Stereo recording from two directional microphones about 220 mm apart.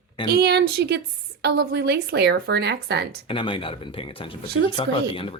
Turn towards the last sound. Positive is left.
turn(degrees=25)  # may be behind; listen again after turning